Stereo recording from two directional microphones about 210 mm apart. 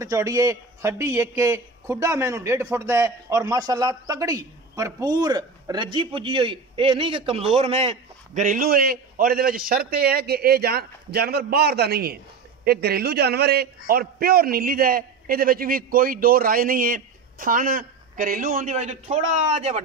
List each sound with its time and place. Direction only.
0.0 s a man's voice: 15° right (ahead or behind); by 19.8 s 30° right (ahead or behind)